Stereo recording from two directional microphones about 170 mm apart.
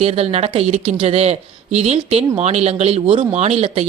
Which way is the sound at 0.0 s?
40° right (ahead or behind).